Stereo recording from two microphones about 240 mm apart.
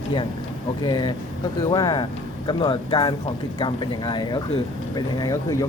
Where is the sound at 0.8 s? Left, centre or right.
Centre.